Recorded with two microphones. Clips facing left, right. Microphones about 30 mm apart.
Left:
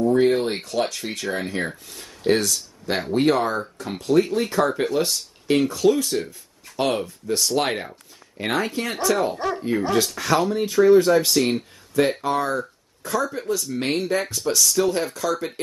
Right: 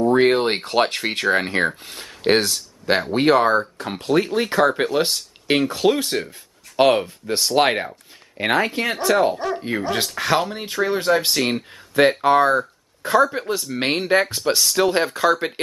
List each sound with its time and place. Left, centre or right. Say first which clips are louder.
0.0 s a sound: right 2 dB; right
0.7 s speech: right 5 dB; right
9.3 s speech: right 1 dB; centre
9.6 s speech: left 2 dB; right